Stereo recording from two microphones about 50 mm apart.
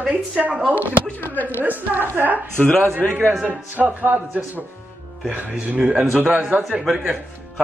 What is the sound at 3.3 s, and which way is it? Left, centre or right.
Speech, right.